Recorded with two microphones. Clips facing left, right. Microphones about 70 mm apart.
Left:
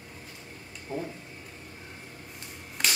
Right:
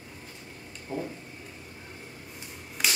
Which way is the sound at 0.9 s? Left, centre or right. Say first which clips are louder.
Even; right.